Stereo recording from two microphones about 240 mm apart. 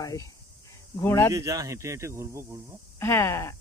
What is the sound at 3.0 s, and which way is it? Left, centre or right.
Speech, centre.